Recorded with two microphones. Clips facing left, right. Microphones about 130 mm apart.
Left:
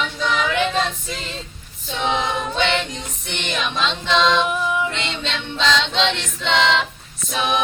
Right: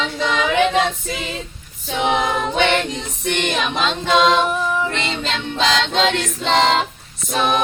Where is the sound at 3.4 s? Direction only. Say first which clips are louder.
Right 1 dB; 50° right (ahead or behind).